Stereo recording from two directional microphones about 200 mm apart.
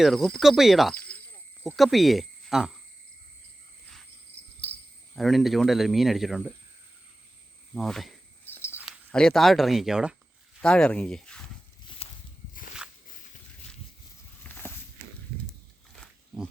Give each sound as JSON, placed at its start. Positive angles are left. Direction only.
{"t": 0.0, "sound": "speech", "side_deg": 0}
{"t": 5.1, "sound": "speech", "side_deg": 0}
{"t": 7.7, "sound": "cricket", "side_deg": 0}
{"t": 8.8, "sound": "speech", "side_deg": 0}
{"t": 12.0, "sound": "walk", "side_deg": 35}
{"t": 14.4, "sound": "a sound", "side_deg": 10}
{"t": 16.0, "sound": "roaring cats", "side_deg": 0}